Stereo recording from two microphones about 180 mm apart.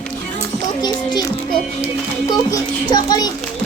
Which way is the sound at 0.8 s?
25° left (ahead or behind).